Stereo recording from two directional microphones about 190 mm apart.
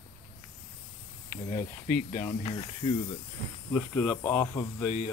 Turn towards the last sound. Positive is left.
turn(degrees=10)  # may be behind; listen again after turning